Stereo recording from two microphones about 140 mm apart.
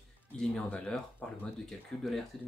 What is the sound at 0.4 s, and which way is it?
Speech, 5° left (ahead or behind).